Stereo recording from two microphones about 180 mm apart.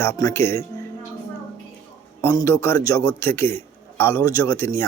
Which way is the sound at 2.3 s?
20° left (ahead or behind).